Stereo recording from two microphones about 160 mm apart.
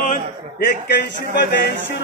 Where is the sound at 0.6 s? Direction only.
90° left.